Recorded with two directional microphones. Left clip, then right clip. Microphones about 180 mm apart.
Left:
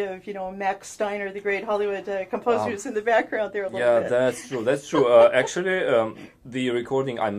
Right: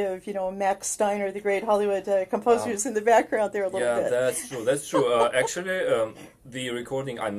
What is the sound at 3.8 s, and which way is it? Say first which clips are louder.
Speech: left 5 dB; 25° left (ahead or behind).